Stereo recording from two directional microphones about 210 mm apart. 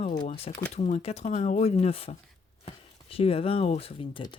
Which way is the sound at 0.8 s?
30° left (ahead or behind).